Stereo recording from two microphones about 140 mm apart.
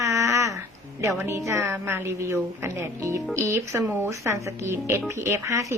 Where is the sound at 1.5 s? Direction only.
20° right (ahead or behind).